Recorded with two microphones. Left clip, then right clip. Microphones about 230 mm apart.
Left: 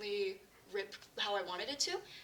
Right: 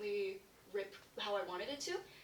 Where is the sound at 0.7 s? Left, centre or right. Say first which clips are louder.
Left 3 dB; left.